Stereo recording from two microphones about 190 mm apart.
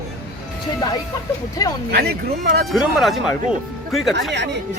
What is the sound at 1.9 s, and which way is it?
Speech, 55° right (ahead or behind).